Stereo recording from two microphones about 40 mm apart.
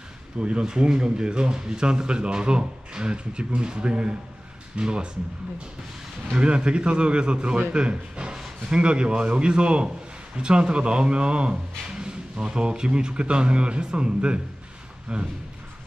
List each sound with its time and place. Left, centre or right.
0.4 s speech: right
6.3 s speech: right